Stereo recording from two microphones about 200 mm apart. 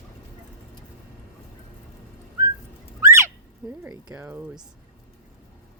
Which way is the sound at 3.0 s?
15° right (ahead or behind).